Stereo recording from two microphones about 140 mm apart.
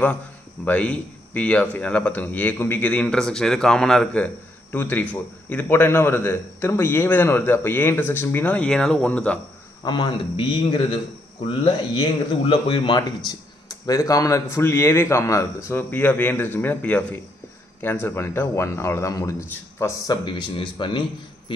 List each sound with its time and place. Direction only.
0.7 s a man's voice: 10° left (ahead or behind)
9.8 s a man's voice: 35° left (ahead or behind)
20.2 s a man's voice: 35° left (ahead or behind)
21.5 s a sound: 40° left (ahead or behind)